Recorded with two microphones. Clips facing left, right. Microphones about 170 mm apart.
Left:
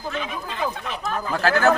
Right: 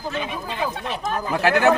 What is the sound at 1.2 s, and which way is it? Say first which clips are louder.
Speech: right 2 dB; 15° right (ahead or behind).